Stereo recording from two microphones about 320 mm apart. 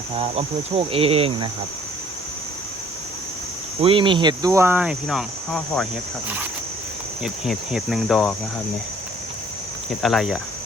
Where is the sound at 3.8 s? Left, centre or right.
Centre.